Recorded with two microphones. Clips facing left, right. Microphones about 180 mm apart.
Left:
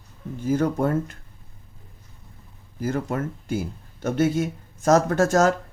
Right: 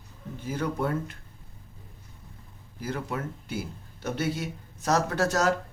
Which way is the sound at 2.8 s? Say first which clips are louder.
Left 6 dB; 45° left (ahead or behind).